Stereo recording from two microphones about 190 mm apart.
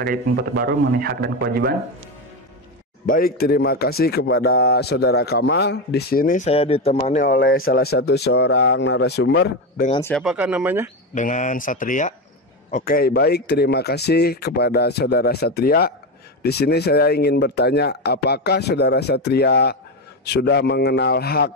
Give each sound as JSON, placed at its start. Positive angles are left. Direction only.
{"t": 0.0, "sound": "a man's voice", "side_deg": -50}
{"t": 3.1, "sound": "speech", "side_deg": 50}
{"t": 7.2, "sound": "speech", "side_deg": 50}
{"t": 10.1, "sound": "speech", "side_deg": -5}
{"t": 11.1, "sound": "speech", "side_deg": 40}